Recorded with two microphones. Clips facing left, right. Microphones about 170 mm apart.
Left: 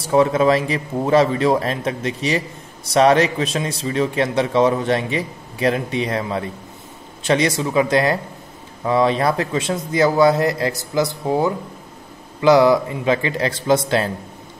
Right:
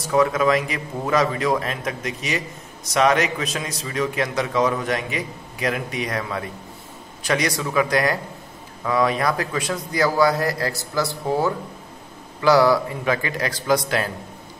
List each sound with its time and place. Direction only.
0.0 s a man's voice: 30° left (ahead or behind)